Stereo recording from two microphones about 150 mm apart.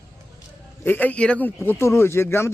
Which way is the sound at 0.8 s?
10° left (ahead or behind).